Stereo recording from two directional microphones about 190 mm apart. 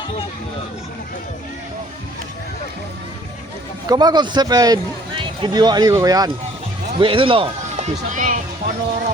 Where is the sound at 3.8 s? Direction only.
20° right (ahead or behind).